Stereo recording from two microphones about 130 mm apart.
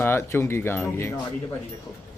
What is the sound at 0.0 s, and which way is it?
Speech, 20° left (ahead or behind).